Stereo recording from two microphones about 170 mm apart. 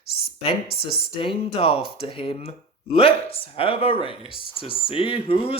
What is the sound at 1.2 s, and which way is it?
Speech, 30° left (ahead or behind).